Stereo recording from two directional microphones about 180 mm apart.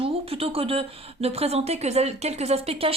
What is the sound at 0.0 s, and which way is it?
A woman's voice, 30° right (ahead or behind).